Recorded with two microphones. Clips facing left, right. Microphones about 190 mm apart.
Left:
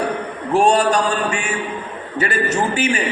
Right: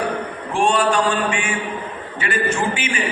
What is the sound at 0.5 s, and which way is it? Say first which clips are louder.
A man's voice: left 3 dB; 40° left (ahead or behind).